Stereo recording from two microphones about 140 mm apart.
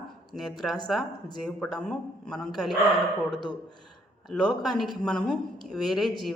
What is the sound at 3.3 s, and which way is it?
Speech, 35° left (ahead or behind).